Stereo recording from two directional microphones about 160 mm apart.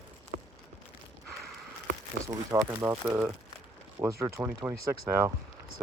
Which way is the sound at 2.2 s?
15° right (ahead or behind).